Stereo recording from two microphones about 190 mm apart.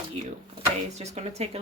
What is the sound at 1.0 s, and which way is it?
Speech, 35° right (ahead or behind).